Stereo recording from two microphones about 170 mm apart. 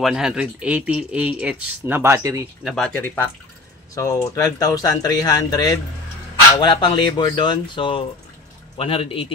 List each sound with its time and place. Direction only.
0.0 s speech: 5° right (ahead or behind)
2.6 s speech: 5° left (ahead or behind); by 9.3 s 35° left (ahead or behind)